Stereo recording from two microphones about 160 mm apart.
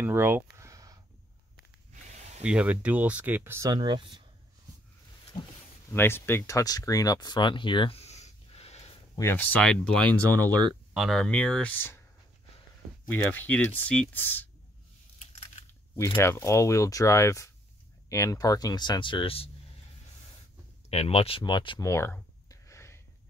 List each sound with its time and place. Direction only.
0.0 s a sound: 15° right (ahead or behind)
2.4 s speech: 5° right (ahead or behind)
3.7 s speech: 30° right (ahead or behind)
5.3 s a sound: 50° left (ahead or behind)
5.9 s speech: 15° left (ahead or behind); by 8.9 s 40° left (ahead or behind)
9.1 s speech: 15° left (ahead or behind)
13.1 s speech: 10° left (ahead or behind)
16.2 s speech: 15° left (ahead or behind); by 19.5 s 35° left (ahead or behind)
20.9 s speech: 40° left (ahead or behind); by 22.9 s 15° left (ahead or behind)